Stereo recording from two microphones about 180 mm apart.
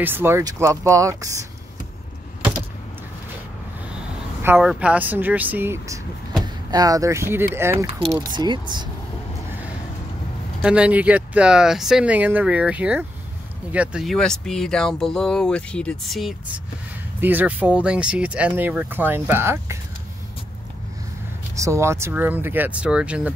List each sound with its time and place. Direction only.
0.0 s speech: 10° right (ahead or behind)
4.6 s speech: 5° right (ahead or behind); by 8.8 s 25° right (ahead or behind)
10.6 s speech: 5° right (ahead or behind)
21.5 s speech: 15° right (ahead or behind)